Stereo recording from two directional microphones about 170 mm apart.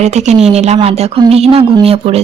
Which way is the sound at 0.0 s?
40° right (ahead or behind).